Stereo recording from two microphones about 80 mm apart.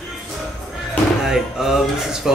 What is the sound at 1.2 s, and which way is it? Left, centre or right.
Speech, centre.